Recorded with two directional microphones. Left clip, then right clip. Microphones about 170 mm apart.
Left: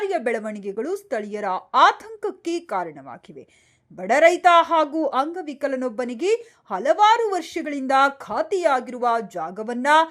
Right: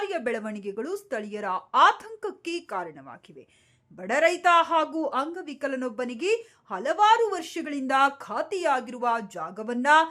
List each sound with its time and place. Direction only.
0.1 s a woman's voice: 20° left (ahead or behind)